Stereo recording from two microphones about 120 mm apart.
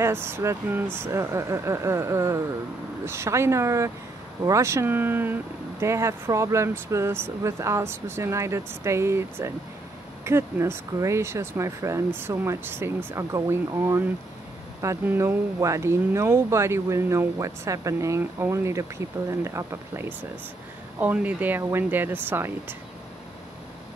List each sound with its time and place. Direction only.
0.0 s speech: 20° right (ahead or behind)